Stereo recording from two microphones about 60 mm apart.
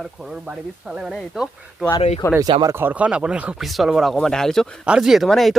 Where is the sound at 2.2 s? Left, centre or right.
Left.